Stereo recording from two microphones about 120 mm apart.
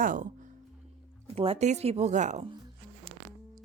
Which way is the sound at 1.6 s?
70° right (ahead or behind).